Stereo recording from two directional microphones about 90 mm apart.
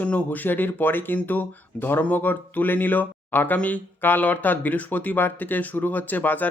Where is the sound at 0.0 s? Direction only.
15° left (ahead or behind).